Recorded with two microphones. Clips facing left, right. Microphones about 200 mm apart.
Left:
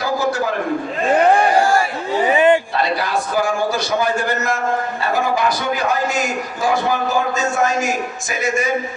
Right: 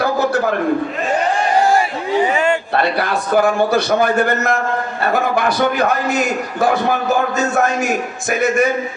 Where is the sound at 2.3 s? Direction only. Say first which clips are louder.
Left 3 dB; 20° left (ahead or behind).